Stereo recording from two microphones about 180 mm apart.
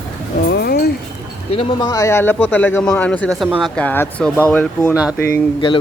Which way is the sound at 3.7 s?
10° left (ahead or behind).